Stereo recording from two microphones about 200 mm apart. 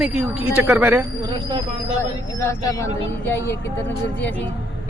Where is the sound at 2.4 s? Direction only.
15° left (ahead or behind).